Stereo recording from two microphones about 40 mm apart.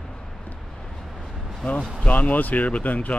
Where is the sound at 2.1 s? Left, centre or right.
Left.